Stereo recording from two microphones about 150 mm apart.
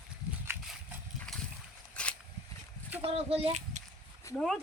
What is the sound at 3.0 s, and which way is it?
Speech, 40° right (ahead or behind).